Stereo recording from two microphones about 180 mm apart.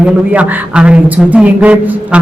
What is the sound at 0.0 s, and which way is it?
Speech, 5° right (ahead or behind).